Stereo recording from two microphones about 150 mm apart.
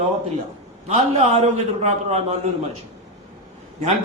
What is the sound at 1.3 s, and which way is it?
Speech, 50° right (ahead or behind).